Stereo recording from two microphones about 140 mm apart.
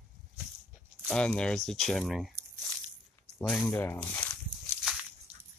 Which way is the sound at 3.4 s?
5° left (ahead or behind).